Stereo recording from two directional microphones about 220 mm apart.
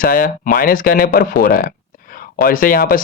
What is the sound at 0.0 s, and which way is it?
Speech, 40° left (ahead or behind).